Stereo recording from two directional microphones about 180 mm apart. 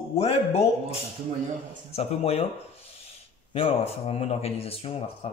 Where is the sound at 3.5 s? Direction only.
35° left (ahead or behind).